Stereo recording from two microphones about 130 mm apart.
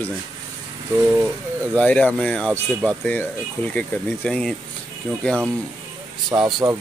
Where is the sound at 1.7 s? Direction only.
10° left (ahead or behind).